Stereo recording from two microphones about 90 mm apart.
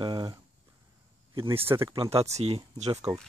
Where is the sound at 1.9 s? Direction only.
75° right (ahead or behind).